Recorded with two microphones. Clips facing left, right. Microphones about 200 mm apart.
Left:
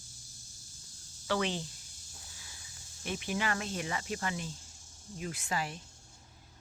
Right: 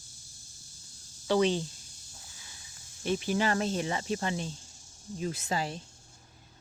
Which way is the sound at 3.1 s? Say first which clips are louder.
Right 6 dB; 35° right (ahead or behind).